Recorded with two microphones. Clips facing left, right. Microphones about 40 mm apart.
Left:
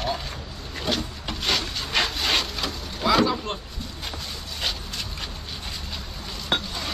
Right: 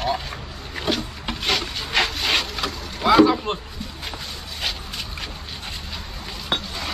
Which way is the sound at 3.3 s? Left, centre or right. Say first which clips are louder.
Right 4 dB; centre.